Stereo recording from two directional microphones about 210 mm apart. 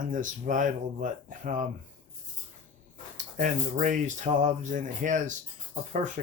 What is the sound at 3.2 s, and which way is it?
Speech, 40° right (ahead or behind).